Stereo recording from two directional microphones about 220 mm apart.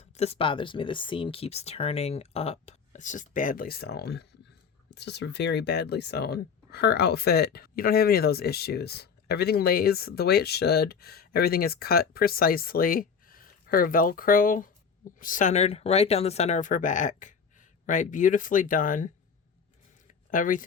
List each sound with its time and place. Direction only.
0.0 s speech: 30° left (ahead or behind)
20.3 s speech: 35° left (ahead or behind)